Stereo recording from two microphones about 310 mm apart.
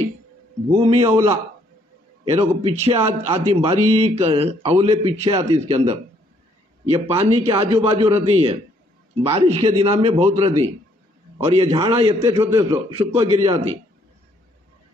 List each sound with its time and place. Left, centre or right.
0.7 s a man's voice: centre